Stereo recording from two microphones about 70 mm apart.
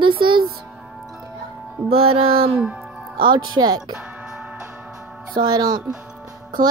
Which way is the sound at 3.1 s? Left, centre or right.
Right.